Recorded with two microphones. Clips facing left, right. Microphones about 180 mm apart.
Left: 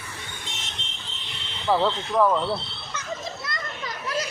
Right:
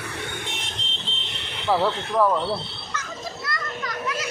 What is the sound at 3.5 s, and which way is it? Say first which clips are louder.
Children playing: right 3 dB; 20° left (ahead or behind).